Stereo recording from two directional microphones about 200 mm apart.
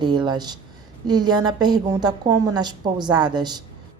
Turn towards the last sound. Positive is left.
turn(degrees=-20)  # may be behind; listen again after turning